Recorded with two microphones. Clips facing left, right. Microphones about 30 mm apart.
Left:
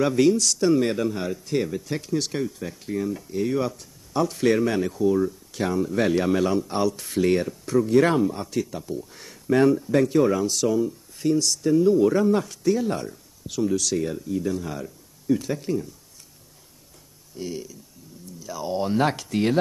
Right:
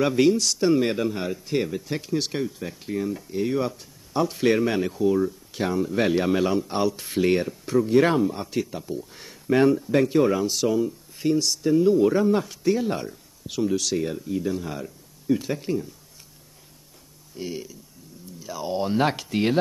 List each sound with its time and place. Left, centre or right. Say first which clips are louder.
0.0 s speech: even; centre
2.4 s speech: even; centre
2.8 s speech: even; right
17.4 s speech: even; right